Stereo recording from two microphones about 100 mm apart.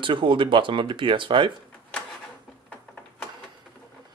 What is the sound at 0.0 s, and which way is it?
Speech, 55° right (ahead or behind).